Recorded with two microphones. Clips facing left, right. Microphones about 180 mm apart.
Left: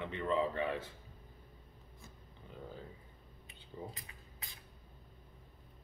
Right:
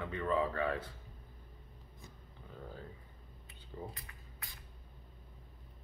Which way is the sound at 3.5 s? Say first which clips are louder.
Right 1 dB; 20° left (ahead or behind).